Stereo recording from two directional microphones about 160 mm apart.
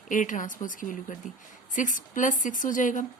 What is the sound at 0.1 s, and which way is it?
A woman's voice, 55° left (ahead or behind).